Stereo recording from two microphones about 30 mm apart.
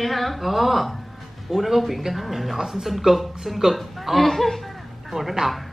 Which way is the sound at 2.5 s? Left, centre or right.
Centre.